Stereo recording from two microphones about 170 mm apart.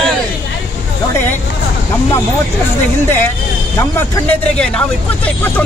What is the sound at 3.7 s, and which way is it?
Speech, 15° left (ahead or behind).